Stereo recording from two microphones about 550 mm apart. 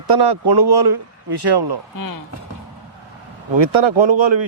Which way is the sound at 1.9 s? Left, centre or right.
Left.